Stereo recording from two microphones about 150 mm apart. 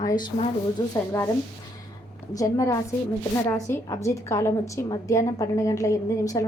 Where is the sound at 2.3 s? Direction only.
25° left (ahead or behind).